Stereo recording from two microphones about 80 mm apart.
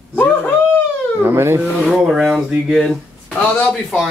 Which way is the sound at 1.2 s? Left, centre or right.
Right.